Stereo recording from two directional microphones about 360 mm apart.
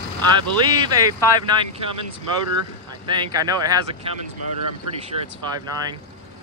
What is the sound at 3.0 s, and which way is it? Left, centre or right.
Speech, centre.